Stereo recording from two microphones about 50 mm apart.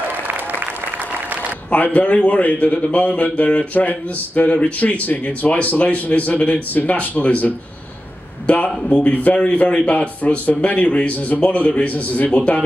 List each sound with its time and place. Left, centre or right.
1.7 s a man's voice: left
12.3 s a man's voice: left